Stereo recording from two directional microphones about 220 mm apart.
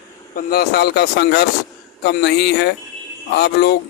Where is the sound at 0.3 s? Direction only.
45° left (ahead or behind).